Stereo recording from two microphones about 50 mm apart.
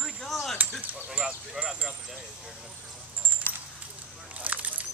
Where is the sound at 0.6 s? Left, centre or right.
Right.